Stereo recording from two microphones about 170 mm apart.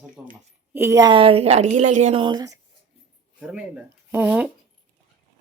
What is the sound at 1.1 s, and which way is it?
Speech, 35° right (ahead or behind).